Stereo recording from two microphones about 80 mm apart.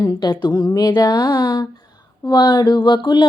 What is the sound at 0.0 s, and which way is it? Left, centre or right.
Speech, left.